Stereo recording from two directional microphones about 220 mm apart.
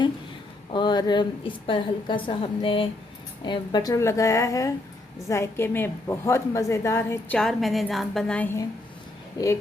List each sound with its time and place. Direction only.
0.7 s a woman's voice: 20° left (ahead or behind)